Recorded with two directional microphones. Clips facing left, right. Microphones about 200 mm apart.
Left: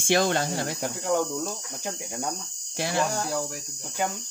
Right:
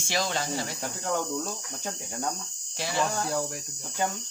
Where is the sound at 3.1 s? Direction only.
Centre (ahead or behind).